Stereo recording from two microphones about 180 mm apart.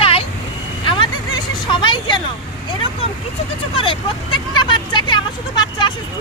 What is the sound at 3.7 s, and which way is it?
Speech, 25° left (ahead or behind).